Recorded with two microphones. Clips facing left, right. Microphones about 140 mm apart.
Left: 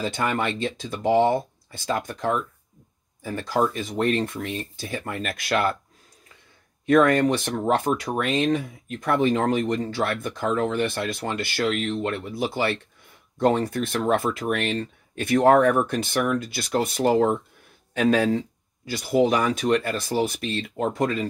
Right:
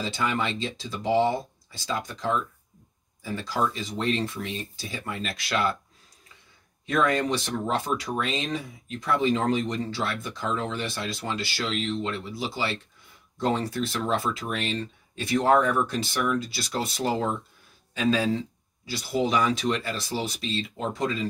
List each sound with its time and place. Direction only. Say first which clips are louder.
0.0 s speech: left 3 dB; 50° left (ahead or behind)
6.9 s speech: left 6 dB; 55° left (ahead or behind)